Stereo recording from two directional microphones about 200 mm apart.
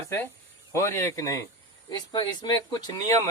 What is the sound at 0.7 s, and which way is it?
A man's voice, 15° left (ahead or behind).